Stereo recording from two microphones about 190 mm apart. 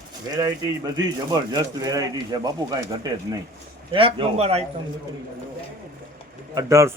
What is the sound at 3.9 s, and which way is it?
Speech, 25° right (ahead or behind).